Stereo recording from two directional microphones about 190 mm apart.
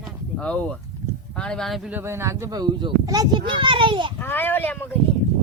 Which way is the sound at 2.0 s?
15° right (ahead or behind).